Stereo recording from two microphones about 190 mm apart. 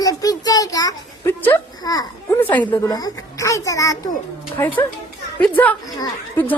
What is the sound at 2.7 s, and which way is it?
A child's voice, 20° left (ahead or behind).